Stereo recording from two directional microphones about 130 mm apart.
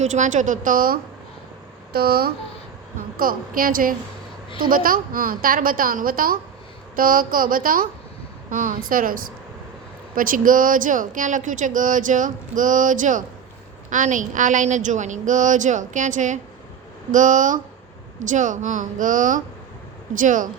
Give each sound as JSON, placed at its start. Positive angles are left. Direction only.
{"t": 0.0, "sound": "speech", "side_deg": -65}
{"t": 3.2, "sound": "a woman's voice", "side_deg": -90}